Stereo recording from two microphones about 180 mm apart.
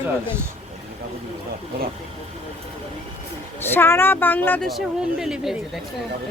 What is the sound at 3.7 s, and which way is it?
Speech, 10° left (ahead or behind).